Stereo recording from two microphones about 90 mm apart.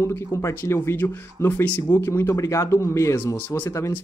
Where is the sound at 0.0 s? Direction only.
30° left (ahead or behind).